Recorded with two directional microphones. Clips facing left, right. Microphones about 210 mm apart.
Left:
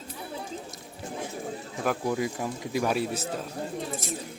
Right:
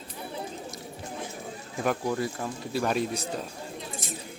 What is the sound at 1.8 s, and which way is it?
A man's voice, 5° left (ahead or behind).